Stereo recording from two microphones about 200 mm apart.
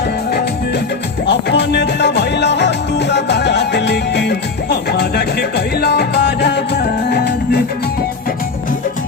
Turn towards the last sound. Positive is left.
turn(degrees=50)  # may be behind; listen again after turning